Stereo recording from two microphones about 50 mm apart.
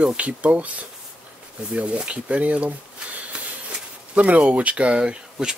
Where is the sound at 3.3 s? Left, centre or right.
Centre.